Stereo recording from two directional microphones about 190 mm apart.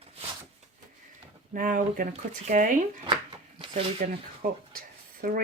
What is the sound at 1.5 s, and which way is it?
Speech, 45° right (ahead or behind).